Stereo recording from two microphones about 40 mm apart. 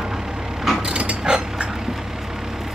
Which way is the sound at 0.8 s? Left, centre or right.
Right.